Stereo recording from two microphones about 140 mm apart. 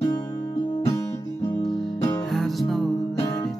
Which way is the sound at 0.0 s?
30° left (ahead or behind).